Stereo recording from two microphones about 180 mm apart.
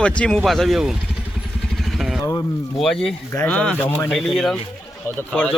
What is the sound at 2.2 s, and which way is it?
Speech, 20° left (ahead or behind).